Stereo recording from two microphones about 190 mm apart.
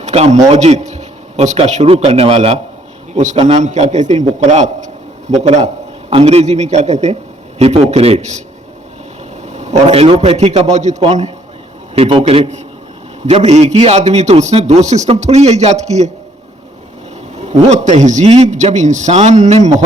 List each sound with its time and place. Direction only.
0.0 s a man's voice: 35° right (ahead or behind)
9.5 s a man's voice: 35° right (ahead or behind)
17.4 s a man's voice: 40° right (ahead or behind)